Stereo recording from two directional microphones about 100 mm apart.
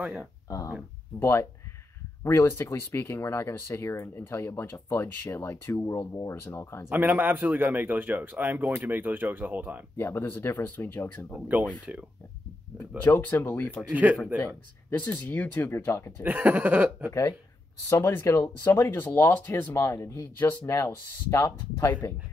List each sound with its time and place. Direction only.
0.0 s speech: 10° right (ahead or behind)
1.2 s speech: 25° left (ahead or behind)
6.9 s speech: 20° right (ahead or behind)
9.9 s speech: 25° left (ahead or behind)
11.4 s speech: 15° right (ahead or behind)
13.0 s speech: 20° left (ahead or behind)
14.9 s speech: 20° left (ahead or behind)
16.2 s speech: 15° right (ahead or behind)
17.1 s speech: 30° left (ahead or behind)